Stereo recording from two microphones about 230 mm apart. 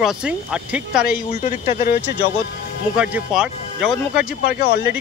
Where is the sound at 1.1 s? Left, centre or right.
Left.